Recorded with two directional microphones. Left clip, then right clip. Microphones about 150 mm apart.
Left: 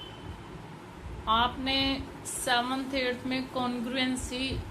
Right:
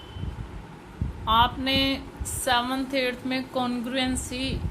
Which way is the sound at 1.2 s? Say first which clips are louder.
Right 5 dB; 30° right (ahead or behind).